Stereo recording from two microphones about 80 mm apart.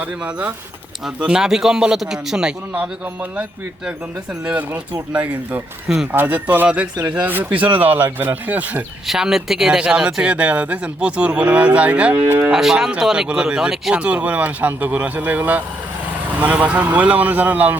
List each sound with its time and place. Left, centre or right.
0.0 s speech: centre
4.4 s speech: centre
9.0 s speech: centre
12.1 s speech: right
12.5 s speech: centre